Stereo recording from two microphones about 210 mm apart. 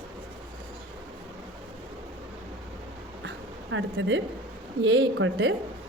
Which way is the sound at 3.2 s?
65° right (ahead or behind).